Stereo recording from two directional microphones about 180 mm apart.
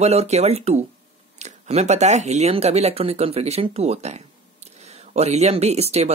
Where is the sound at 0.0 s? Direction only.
35° right (ahead or behind).